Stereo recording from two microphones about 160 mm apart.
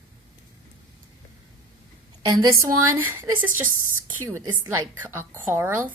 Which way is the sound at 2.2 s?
25° right (ahead or behind).